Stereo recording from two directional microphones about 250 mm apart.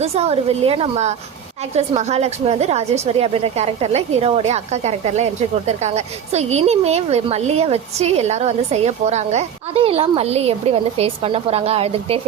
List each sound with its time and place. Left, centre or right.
0.0 s a woman's voice: right